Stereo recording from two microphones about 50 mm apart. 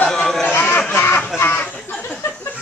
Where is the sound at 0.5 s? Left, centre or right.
Left.